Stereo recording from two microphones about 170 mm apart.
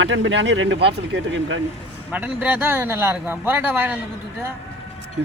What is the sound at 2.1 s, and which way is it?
A man's voice, 10° right (ahead or behind).